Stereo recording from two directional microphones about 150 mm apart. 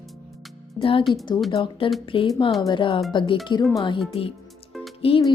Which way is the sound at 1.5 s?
35° left (ahead or behind).